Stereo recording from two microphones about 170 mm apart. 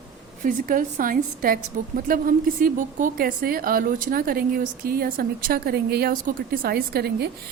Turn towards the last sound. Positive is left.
turn(degrees=-70)  # may be behind; listen again after turning